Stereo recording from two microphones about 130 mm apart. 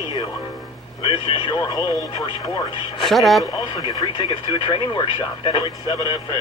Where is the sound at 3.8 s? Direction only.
30° left (ahead or behind).